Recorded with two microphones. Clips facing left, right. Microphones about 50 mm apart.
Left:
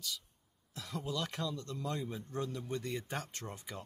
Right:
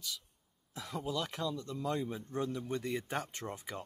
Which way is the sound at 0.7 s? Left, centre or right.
Centre.